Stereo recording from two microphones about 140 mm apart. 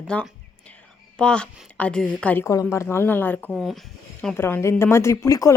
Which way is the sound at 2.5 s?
20° left (ahead or behind).